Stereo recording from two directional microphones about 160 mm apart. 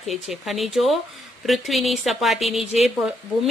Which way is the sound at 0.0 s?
Centre (ahead or behind).